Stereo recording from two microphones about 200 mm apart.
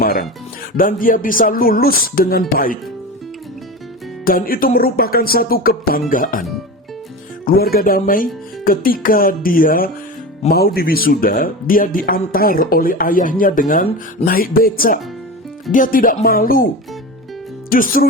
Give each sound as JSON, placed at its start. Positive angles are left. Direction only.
{"t": 0.0, "sound": "music", "side_deg": 45}
{"t": 0.8, "sound": "a man's voice", "side_deg": 45}
{"t": 4.3, "sound": "a man's voice", "side_deg": 45}
{"t": 7.4, "sound": "a man's voice", "side_deg": 50}
{"t": 17.7, "sound": "speech", "side_deg": 45}